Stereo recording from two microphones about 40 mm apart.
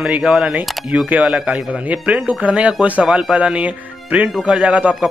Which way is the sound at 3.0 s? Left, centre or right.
Centre.